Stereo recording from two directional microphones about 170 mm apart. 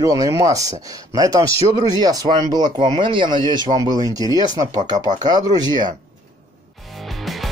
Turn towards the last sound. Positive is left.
turn(degrees=0)  # may be behind; listen again after turning